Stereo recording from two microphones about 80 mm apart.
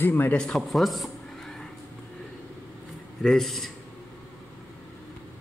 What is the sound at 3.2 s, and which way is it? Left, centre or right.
Speech, centre.